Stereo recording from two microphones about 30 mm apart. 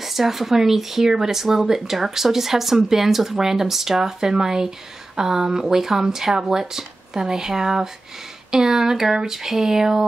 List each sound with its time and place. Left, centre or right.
0.0 s speech: centre